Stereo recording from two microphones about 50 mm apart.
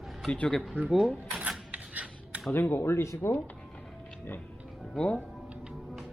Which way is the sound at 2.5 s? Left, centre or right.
Left.